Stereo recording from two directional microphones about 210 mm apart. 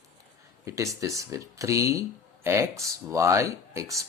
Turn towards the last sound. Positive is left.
turn(degrees=-15)  # may be behind; listen again after turning